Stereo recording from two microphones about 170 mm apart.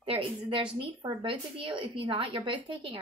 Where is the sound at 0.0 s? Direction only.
30° right (ahead or behind).